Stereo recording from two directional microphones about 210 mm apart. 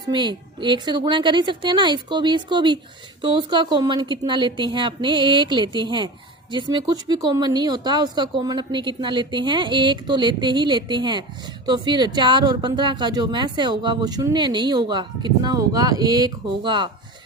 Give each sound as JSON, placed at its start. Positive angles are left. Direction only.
{"t": 0.1, "sound": "speech", "side_deg": -20}